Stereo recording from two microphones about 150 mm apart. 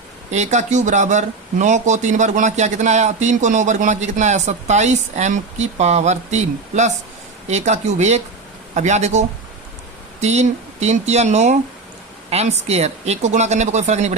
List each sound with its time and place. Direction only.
0.3 s speech: 50° right (ahead or behind)